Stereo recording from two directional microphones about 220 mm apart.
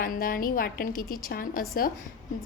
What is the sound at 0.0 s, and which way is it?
A woman's voice, 40° left (ahead or behind).